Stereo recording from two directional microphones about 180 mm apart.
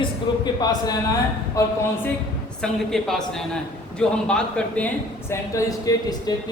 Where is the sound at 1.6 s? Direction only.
15° left (ahead or behind).